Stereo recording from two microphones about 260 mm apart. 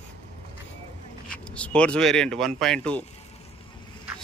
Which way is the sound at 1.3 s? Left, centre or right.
Centre.